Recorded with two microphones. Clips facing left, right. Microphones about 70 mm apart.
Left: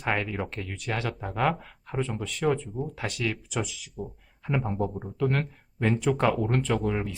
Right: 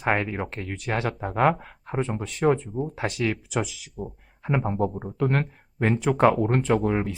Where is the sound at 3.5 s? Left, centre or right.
Right.